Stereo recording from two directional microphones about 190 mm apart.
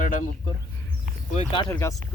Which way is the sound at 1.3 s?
35° left (ahead or behind).